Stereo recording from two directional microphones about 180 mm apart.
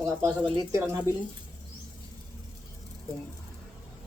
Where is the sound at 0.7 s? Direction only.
15° right (ahead or behind).